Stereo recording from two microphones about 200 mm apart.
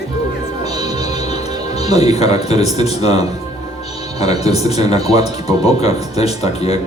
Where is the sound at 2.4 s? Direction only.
30° left (ahead or behind).